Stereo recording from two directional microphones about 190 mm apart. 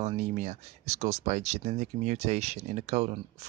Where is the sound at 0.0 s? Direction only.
35° right (ahead or behind).